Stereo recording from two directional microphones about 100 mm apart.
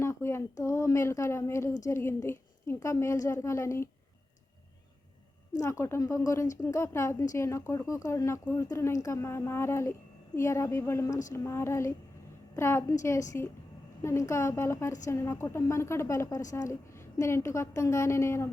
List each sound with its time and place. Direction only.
0.0 s a woman's voice: 25° left (ahead or behind)
5.5 s a woman's voice: 30° left (ahead or behind)